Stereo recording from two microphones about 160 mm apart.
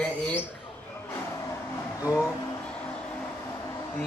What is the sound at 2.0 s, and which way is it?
Speech, 20° left (ahead or behind).